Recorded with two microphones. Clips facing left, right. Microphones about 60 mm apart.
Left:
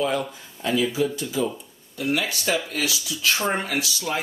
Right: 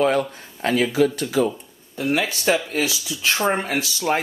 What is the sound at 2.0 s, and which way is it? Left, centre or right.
Speech, right.